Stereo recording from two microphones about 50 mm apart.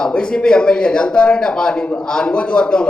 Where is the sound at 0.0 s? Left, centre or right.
Centre.